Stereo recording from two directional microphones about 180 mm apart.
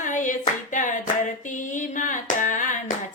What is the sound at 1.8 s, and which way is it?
Hands, 45° left (ahead or behind).